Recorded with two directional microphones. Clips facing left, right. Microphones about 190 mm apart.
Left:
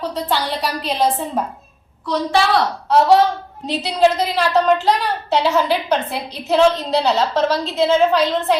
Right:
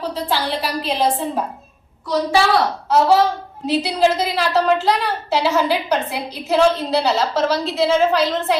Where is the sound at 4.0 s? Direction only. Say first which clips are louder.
Left 4 dB; 5° right (ahead or behind).